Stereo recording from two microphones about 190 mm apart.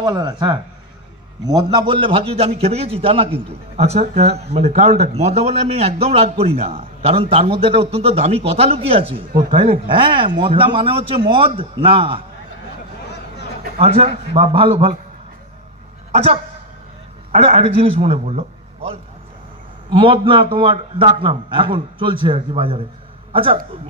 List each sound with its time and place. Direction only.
0.0 s a man's voice: 25° right (ahead or behind)
13.7 s a man's voice: 30° right (ahead or behind)
16.1 s a man's voice: 35° right (ahead or behind)